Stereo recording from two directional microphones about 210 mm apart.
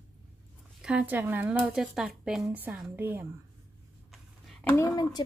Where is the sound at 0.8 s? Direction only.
5° right (ahead or behind).